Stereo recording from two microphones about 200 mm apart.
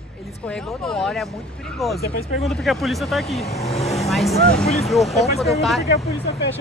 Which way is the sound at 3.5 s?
30° left (ahead or behind).